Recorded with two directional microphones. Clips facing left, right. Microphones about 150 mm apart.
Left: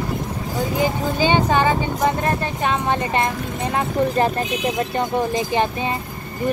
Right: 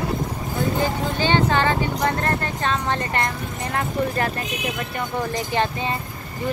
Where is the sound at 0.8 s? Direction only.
15° left (ahead or behind).